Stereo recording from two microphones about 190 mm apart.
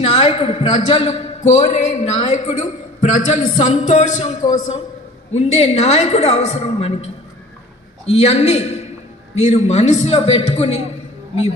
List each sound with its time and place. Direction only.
0.0 s a man's voice: 30° left (ahead or behind)
5.5 s a man's voice: 35° left (ahead or behind)